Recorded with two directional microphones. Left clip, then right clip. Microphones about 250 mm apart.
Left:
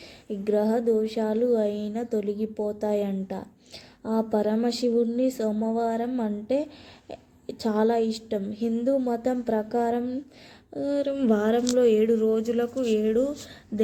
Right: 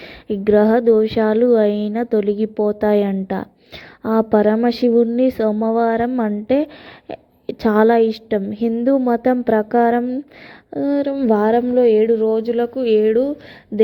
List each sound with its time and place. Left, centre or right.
0.3 s a woman's voice: right